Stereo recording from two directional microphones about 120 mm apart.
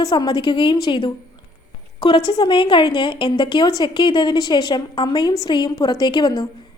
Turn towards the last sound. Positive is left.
turn(degrees=35)  # may be behind; listen again after turning